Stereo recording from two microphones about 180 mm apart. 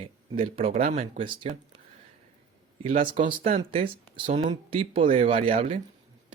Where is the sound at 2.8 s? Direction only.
40° right (ahead or behind).